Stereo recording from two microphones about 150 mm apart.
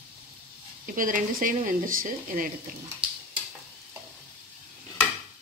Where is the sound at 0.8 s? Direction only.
65° right (ahead or behind).